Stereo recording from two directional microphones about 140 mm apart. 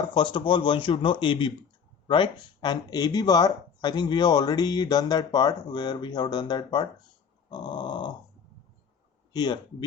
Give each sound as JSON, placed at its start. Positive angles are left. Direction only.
{"t": 0.1, "sound": "speech", "side_deg": 35}
{"t": 9.3, "sound": "speech", "side_deg": 30}